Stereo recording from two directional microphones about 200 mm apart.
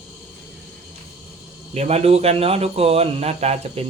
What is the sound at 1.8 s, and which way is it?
Speech, 30° right (ahead or behind).